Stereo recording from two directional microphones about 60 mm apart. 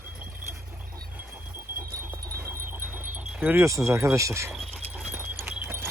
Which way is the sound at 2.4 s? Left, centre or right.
Right.